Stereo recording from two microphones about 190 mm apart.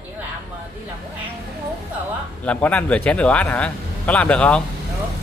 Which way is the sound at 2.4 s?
5° left (ahead or behind).